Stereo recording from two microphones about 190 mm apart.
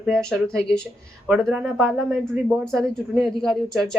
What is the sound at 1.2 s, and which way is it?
Speech, 5° right (ahead or behind).